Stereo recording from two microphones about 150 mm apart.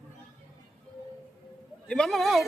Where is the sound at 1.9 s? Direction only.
Centre (ahead or behind).